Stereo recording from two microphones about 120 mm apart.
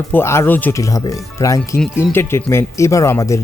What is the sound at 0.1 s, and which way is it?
Speech, 20° left (ahead or behind).